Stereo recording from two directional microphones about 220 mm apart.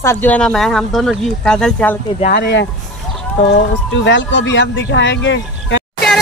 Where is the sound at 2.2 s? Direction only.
40° left (ahead or behind).